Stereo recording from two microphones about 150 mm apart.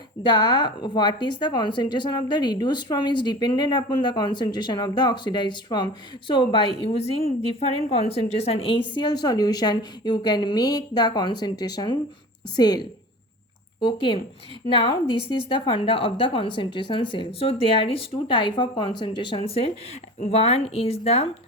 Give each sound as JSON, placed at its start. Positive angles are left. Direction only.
{"t": 0.2, "sound": "a woman's voice", "side_deg": 30}
{"t": 9.0, "sound": "a woman's voice", "side_deg": 25}